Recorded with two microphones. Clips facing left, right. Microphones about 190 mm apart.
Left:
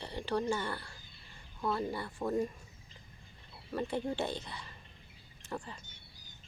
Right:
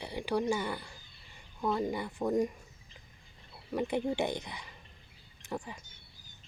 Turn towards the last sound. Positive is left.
turn(degrees=-15)  # may be behind; listen again after turning